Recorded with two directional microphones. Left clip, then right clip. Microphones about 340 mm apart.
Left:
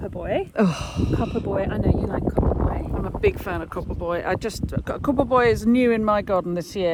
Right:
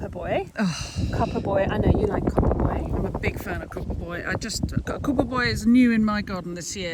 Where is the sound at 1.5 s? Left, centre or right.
Right.